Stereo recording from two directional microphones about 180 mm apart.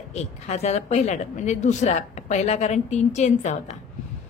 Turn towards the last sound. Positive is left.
turn(degrees=40)  # may be behind; listen again after turning